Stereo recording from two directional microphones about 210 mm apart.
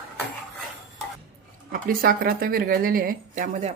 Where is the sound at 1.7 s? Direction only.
45° right (ahead or behind).